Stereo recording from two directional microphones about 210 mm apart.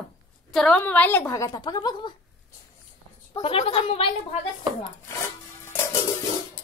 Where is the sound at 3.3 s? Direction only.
25° left (ahead or behind).